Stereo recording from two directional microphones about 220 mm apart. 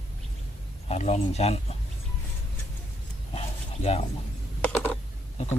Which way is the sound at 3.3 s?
30° left (ahead or behind).